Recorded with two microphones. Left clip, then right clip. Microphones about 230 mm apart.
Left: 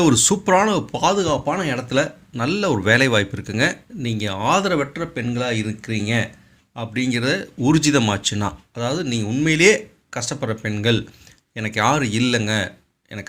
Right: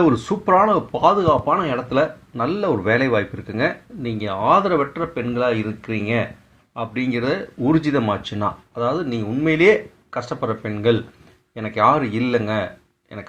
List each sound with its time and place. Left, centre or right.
0.0 s speech: left